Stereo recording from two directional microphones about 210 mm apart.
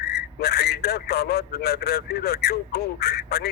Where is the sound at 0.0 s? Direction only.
50° left (ahead or behind).